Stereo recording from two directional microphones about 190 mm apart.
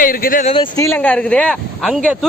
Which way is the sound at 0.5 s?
15° left (ahead or behind).